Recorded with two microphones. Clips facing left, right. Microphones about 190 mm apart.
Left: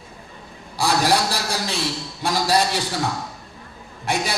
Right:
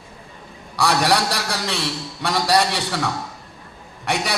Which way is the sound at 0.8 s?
65° right (ahead or behind).